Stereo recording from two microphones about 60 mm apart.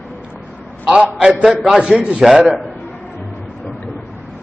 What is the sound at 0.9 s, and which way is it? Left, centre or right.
Speech, centre.